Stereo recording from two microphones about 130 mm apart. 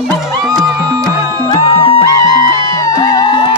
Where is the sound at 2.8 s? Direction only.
30° left (ahead or behind).